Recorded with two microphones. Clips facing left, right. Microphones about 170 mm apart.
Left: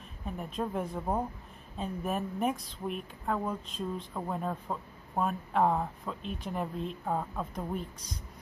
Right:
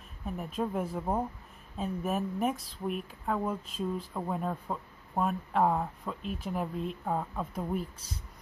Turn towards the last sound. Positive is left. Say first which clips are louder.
# right 2 dB
turn(degrees=-5)  # may be behind; listen again after turning